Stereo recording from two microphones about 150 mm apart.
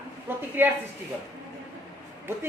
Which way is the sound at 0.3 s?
15° right (ahead or behind).